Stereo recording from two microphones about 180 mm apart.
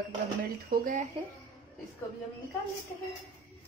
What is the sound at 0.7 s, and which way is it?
Speech, 50° right (ahead or behind).